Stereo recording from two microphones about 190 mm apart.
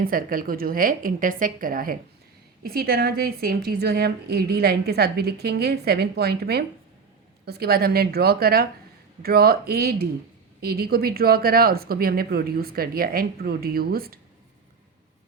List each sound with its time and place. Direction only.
0.0 s a woman's voice: 50° right (ahead or behind)